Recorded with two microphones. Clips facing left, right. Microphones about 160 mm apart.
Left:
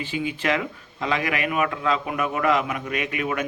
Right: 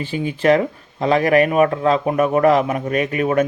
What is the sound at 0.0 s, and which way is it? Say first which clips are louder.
Speech: right 7 dB; 40° right (ahead or behind).